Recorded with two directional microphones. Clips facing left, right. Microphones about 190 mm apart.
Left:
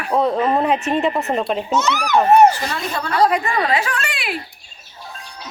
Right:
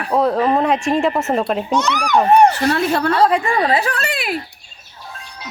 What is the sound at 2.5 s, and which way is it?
Speech, 65° right (ahead or behind).